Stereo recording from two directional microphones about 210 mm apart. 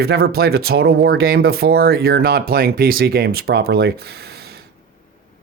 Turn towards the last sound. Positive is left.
turn(degrees=-50)  # may be behind; listen again after turning